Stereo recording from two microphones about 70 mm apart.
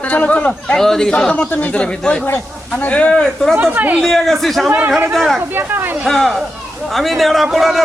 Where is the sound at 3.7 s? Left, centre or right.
Right.